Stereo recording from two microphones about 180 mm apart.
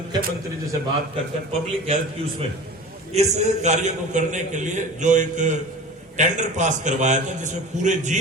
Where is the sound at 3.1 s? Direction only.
40° right (ahead or behind).